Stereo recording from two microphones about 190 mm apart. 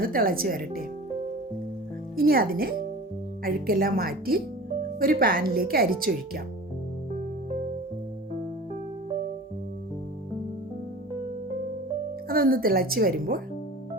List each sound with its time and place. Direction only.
0.0 s speech: 50° right (ahead or behind)
2.1 s speech: 50° right (ahead or behind)
12.3 s speech: 50° right (ahead or behind)